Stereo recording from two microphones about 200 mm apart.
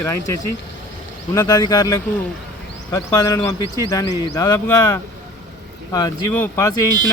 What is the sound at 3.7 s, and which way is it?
Speech, 20° left (ahead or behind).